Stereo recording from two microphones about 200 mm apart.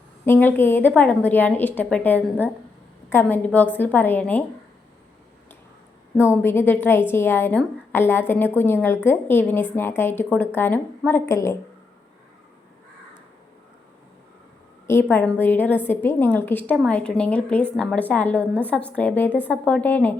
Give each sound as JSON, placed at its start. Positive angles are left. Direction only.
{"t": 0.3, "sound": "a woman's voice", "side_deg": 10}
{"t": 6.1, "sound": "a woman's voice", "side_deg": 10}
{"t": 14.8, "sound": "a woman's voice", "side_deg": 10}